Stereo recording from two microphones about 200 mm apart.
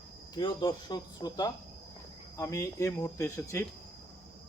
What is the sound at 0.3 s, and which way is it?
Speech, 20° left (ahead or behind).